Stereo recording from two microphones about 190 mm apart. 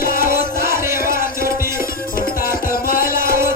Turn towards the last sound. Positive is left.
turn(degrees=-15)  # may be behind; listen again after turning